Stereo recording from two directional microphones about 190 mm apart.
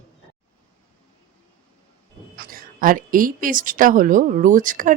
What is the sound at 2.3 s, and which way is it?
A woman's voice, 50° right (ahead or behind).